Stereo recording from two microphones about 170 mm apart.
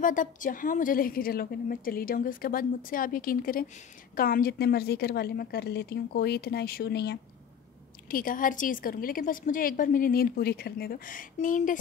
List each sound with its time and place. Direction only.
0.0 s a woman's voice: 50° left (ahead or behind); by 7.2 s 75° left (ahead or behind)
8.1 s a woman's voice: 55° left (ahead or behind)